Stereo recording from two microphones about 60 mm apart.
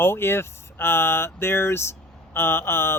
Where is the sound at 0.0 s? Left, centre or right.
Left.